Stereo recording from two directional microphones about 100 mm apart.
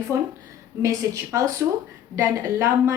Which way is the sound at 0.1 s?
35° right (ahead or behind).